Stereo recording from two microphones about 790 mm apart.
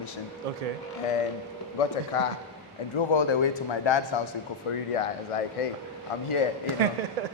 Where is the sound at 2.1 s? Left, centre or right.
Left.